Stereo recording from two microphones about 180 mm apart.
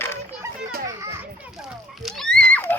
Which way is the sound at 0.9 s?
15° right (ahead or behind).